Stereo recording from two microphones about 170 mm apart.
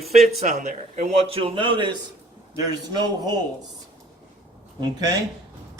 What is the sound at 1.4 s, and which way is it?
Speech, 30° right (ahead or behind).